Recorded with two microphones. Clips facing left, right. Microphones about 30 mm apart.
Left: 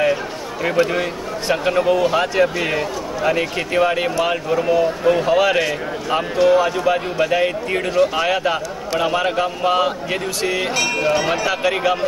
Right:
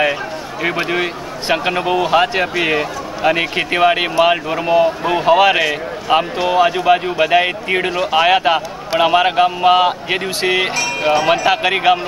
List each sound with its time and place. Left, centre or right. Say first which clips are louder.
0.0 s a man's voice: right 1 dB; right